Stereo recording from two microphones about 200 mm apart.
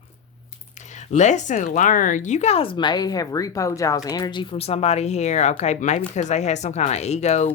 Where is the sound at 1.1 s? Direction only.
35° left (ahead or behind).